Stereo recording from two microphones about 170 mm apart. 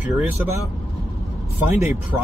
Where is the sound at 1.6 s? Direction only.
15° right (ahead or behind).